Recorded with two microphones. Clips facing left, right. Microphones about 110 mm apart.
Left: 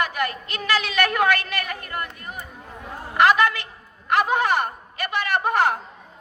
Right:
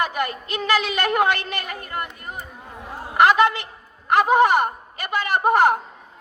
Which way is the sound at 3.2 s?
20° right (ahead or behind).